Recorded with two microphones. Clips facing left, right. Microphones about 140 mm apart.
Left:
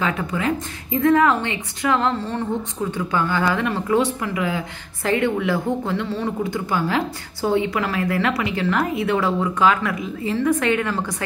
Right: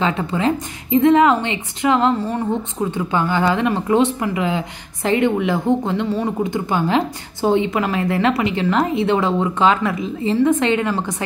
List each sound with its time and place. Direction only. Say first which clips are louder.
0.0 s speech: right 4 dB; 25° right (ahead or behind)